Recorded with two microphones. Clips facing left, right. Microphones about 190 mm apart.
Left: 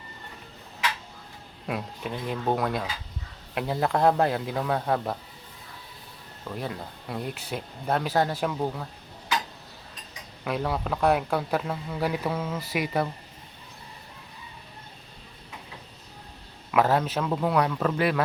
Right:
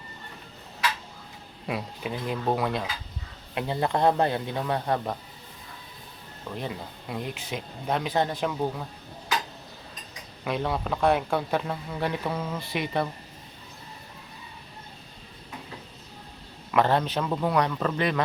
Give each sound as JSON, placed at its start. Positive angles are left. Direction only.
{"t": 1.6, "sound": "speech", "side_deg": 0}
{"t": 6.6, "sound": "speech", "side_deg": 0}
{"t": 10.4, "sound": "speech", "side_deg": 5}
{"t": 16.7, "sound": "speech", "side_deg": 5}